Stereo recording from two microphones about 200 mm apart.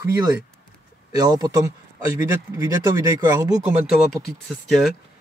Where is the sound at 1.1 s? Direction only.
20° right (ahead or behind).